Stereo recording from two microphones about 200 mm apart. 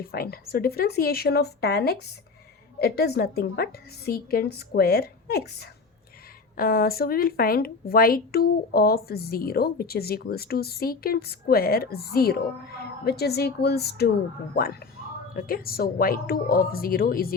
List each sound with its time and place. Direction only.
0.0 s a woman's voice: 50° left (ahead or behind)